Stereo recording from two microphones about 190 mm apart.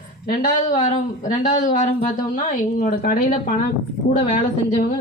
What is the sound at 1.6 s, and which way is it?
A woman's voice, 40° left (ahead or behind).